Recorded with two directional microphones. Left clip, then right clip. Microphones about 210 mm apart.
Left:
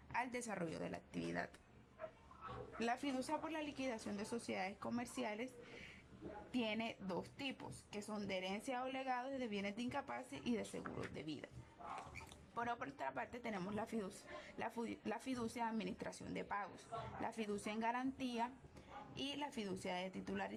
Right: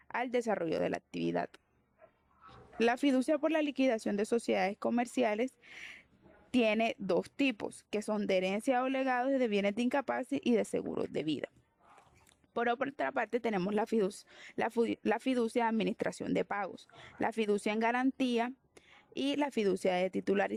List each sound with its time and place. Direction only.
0.1 s speech: 40° right (ahead or behind)
2.7 s speech: 45° right (ahead or behind)
12.5 s speech: 45° right (ahead or behind)